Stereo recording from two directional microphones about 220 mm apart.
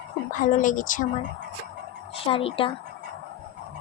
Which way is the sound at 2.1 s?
25° left (ahead or behind).